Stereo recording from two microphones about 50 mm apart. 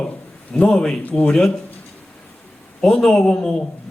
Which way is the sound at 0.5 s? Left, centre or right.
Left.